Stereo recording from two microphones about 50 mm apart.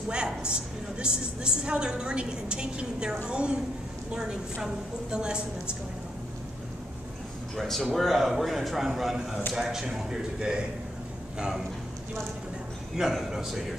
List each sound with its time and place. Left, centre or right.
0.1 s a woman's voice: centre
4.6 s a woman's voice: centre
7.5 s a man's voice: centre
12.9 s a woman's voice: centre